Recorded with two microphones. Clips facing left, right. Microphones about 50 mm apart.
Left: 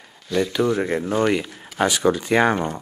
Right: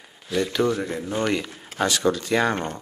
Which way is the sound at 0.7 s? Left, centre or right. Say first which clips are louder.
Left 6 dB; left.